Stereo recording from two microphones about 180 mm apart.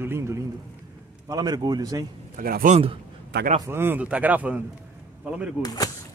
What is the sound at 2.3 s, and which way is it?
Speech, 50° right (ahead or behind).